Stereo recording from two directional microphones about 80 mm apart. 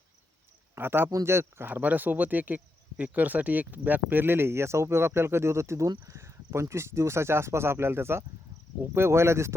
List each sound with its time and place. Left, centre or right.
0.8 s speech: right